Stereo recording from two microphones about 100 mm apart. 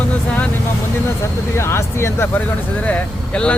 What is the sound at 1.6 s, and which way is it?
Speech, 25° left (ahead or behind).